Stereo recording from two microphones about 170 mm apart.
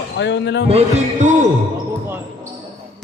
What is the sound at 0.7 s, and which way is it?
Speech, 40° right (ahead or behind).